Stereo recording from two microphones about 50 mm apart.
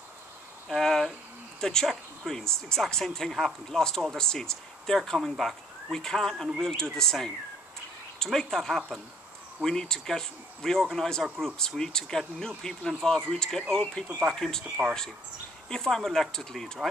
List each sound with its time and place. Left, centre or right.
0.7 s cricket: centre
1.6 s speech: centre
14.8 s speech: centre
15.7 s speech: centre